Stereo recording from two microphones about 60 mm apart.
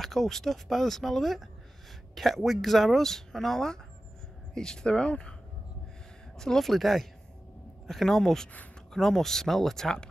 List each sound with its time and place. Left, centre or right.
0.0 s speech: centre
6.3 s speech: centre